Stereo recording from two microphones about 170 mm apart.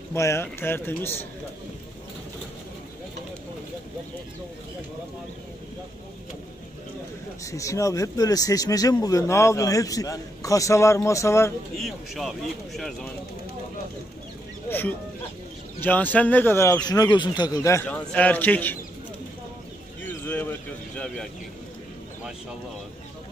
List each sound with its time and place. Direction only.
0.1 s speech: 15° left (ahead or behind)
7.4 s a man's voice: 20° left (ahead or behind)
11.8 s speech: centre (ahead or behind)
14.7 s speech: 10° left (ahead or behind)
20.0 s a sound: 10° left (ahead or behind)